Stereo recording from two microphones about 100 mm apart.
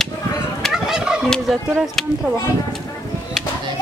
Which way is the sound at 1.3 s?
5° left (ahead or behind).